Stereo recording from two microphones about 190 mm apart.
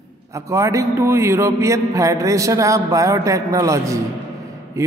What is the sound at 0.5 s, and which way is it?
Music, 15° right (ahead or behind).